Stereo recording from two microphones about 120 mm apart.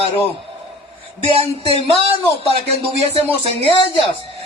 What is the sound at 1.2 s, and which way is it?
Speech, 50° right (ahead or behind).